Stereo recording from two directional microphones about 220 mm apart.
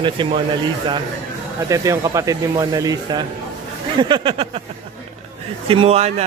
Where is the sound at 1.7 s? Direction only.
15° right (ahead or behind).